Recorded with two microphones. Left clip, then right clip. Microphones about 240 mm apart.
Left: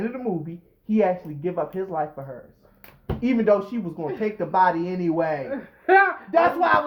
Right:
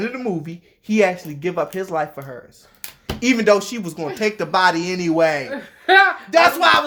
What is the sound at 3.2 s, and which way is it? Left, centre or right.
A woman's voice, right.